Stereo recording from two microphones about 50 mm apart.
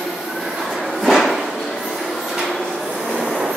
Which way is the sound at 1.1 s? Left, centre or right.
Centre.